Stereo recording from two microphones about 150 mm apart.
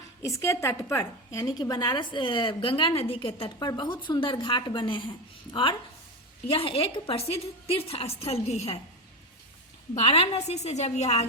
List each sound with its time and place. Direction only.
0.2 s a woman's voice: 20° left (ahead or behind); by 8.8 s 45° left (ahead or behind)
9.9 s a woman's voice: 40° left (ahead or behind)